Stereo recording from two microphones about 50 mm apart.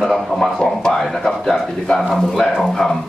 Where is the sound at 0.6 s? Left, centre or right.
Centre.